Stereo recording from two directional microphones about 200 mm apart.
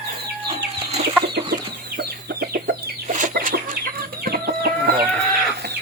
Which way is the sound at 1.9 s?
50° right (ahead or behind).